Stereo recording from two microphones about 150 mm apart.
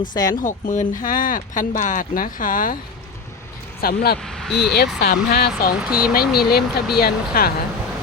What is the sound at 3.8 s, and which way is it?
Speech, 90° left.